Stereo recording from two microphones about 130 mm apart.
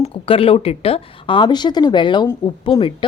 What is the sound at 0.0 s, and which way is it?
Speech, 45° left (ahead or behind).